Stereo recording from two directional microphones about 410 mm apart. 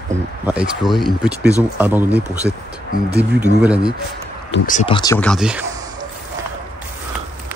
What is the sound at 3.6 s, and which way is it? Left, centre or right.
Speech, centre.